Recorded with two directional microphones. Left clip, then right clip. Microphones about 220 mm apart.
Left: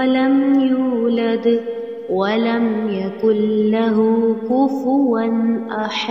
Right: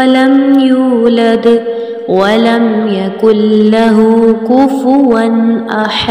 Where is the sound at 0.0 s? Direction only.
40° right (ahead or behind).